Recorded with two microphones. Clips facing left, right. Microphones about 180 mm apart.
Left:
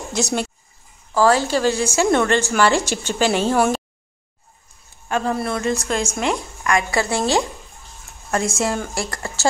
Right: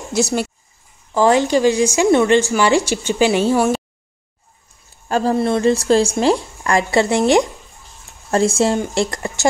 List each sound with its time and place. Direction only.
0.1 s speech: 5° right (ahead or behind)
1.1 s speech: 20° right (ahead or behind)
5.0 s speech: 35° right (ahead or behind)
8.3 s speech: 30° right (ahead or behind)
8.7 s speech: 20° right (ahead or behind)